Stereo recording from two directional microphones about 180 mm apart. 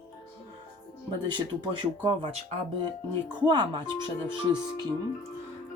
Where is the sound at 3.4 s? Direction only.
25° right (ahead or behind).